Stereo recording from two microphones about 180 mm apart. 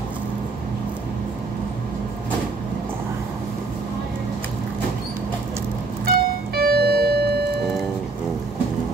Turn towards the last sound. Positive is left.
turn(degrees=-60)  # may be behind; listen again after turning